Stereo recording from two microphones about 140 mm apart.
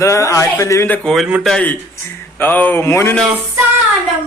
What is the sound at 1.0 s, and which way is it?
A man's voice, 5° left (ahead or behind).